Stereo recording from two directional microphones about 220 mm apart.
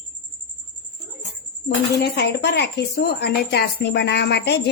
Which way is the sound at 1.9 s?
50° left (ahead or behind).